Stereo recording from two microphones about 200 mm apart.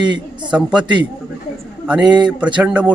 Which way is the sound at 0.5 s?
5° right (ahead or behind).